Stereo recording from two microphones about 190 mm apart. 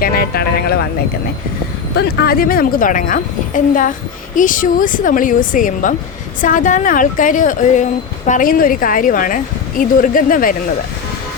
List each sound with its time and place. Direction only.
0.0 s speech: 55° left (ahead or behind)
2.0 s a woman's voice: 50° left (ahead or behind)